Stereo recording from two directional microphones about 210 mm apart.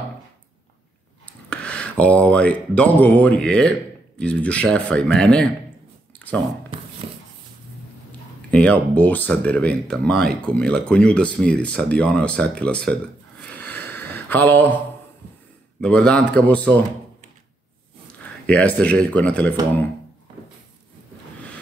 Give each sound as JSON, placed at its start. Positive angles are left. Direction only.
{"t": 1.2, "sound": "speech", "side_deg": 5}
{"t": 6.1, "sound": "a sound", "side_deg": 5}
{"t": 7.0, "sound": "dog", "side_deg": -25}
{"t": 8.5, "sound": "speech", "side_deg": 5}
{"t": 13.4, "sound": "a sound", "side_deg": 10}
{"t": 15.8, "sound": "speech", "side_deg": 5}
{"t": 18.5, "sound": "speech", "side_deg": 5}